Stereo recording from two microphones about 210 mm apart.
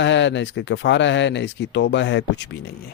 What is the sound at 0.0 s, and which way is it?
Speech, 60° left (ahead or behind).